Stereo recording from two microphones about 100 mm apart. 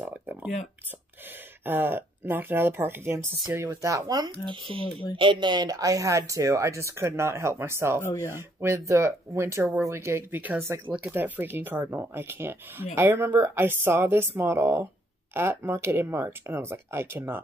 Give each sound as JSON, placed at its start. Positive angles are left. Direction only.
{"t": 0.0, "sound": "a sound", "side_deg": -20}
{"t": 1.6, "sound": "speech", "side_deg": -20}
{"t": 4.5, "sound": "speech", "side_deg": -60}